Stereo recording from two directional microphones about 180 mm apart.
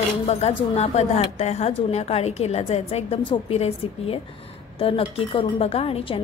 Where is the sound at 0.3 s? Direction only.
35° left (ahead or behind).